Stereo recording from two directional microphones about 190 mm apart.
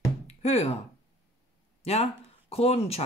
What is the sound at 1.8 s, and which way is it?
Speech, 35° left (ahead or behind).